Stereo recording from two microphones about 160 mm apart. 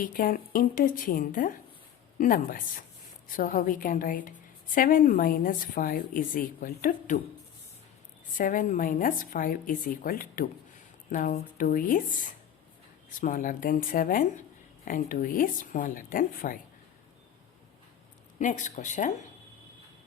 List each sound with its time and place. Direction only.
0.0 s a woman's voice: 60° left (ahead or behind)
8.4 s a woman's voice: 55° left (ahead or behind)
18.3 s speech: 50° left (ahead or behind)